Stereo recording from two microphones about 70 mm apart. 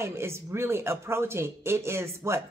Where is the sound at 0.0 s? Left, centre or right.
Right.